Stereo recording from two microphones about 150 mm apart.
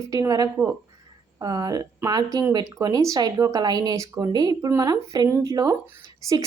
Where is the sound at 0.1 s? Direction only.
25° right (ahead or behind).